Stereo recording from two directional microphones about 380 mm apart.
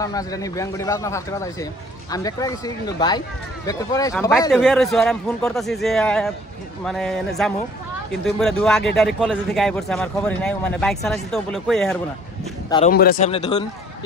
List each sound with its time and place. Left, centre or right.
0.0 s a man's voice: centre
12.6 s speech: centre
12.9 s speech: left